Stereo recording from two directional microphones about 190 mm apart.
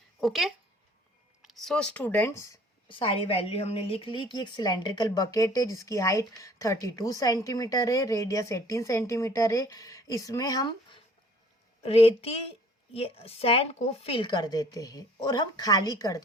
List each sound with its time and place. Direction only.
0.2 s speech: centre (ahead or behind); by 2.6 s 15° left (ahead or behind)
2.9 s a woman's voice: 25° left (ahead or behind)